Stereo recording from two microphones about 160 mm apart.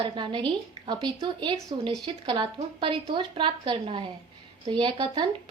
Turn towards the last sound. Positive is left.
turn(degrees=-35)  # may be behind; listen again after turning